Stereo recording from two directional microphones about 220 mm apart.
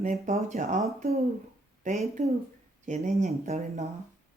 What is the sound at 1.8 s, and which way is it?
Speech, 35° right (ahead or behind).